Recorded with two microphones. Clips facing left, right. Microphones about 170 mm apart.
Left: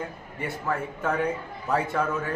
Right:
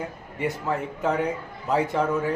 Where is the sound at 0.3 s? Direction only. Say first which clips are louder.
Right 3 dB; 20° right (ahead or behind).